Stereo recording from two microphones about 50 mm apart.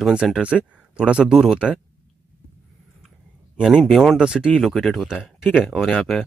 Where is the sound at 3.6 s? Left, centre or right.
Centre.